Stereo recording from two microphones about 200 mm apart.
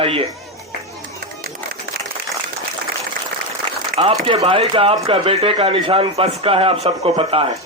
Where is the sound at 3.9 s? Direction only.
30° right (ahead or behind).